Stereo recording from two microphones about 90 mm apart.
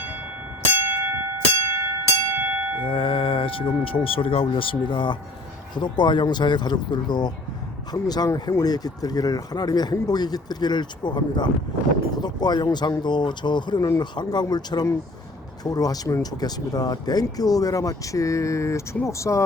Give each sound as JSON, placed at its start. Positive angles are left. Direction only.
{"t": 0.9, "sound": "bell", "side_deg": -25}
{"t": 2.4, "sound": "bell", "side_deg": -20}
{"t": 2.8, "sound": "speech", "side_deg": 75}